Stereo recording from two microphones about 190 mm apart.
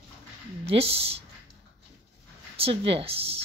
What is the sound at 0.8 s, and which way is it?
Speech, 30° right (ahead or behind).